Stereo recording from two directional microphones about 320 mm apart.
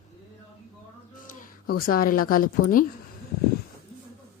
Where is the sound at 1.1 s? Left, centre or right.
Left.